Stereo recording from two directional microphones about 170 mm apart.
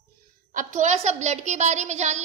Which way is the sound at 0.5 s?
45° right (ahead or behind).